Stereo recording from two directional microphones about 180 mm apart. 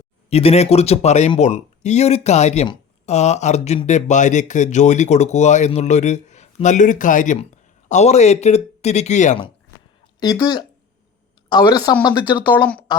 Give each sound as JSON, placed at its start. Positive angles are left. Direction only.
{"t": 0.3, "sound": "speech", "side_deg": 35}
{"t": 10.2, "sound": "speech", "side_deg": 20}
{"t": 12.5, "sound": "speech", "side_deg": 10}